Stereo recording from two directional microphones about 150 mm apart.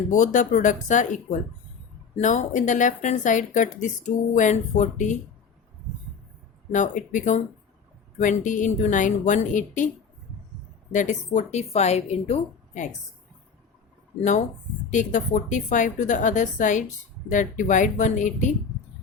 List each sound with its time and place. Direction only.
0.1 s a woman's voice: 60° left (ahead or behind)
6.7 s a woman's voice: 55° left (ahead or behind)
10.9 s a woman's voice: 50° left (ahead or behind)
14.2 s a woman's voice: 50° left (ahead or behind)